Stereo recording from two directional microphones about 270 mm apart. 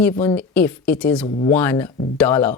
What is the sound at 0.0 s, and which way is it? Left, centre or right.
A woman's voice, centre.